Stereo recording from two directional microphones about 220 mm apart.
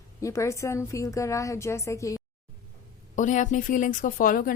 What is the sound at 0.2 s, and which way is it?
A woman's voice, 15° left (ahead or behind).